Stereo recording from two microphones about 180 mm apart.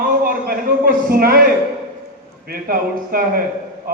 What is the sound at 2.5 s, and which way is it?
Speech, 55° right (ahead or behind).